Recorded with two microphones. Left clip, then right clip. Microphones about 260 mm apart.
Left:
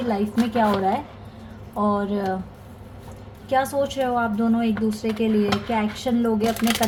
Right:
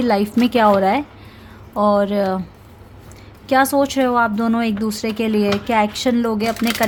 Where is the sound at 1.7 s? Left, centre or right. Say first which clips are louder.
Right 7 dB; right.